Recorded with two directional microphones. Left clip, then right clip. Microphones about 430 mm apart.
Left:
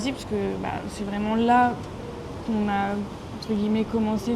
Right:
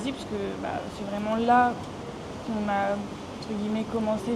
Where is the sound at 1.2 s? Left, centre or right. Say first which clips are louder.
Left 1 dB; centre.